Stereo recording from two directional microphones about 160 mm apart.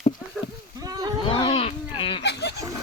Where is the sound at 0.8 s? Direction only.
25° right (ahead or behind).